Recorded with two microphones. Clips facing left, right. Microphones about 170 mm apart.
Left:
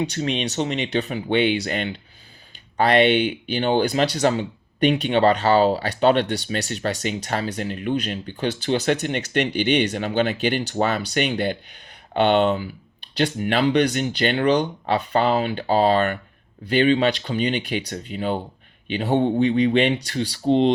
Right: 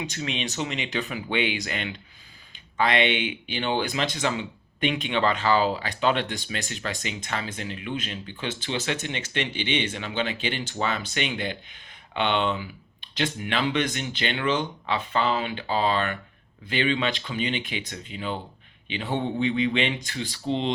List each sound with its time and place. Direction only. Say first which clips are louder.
0.0 s speech: left 7 dB; 35° left (ahead or behind)